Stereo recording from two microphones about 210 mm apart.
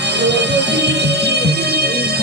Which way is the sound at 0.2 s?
55° right (ahead or behind).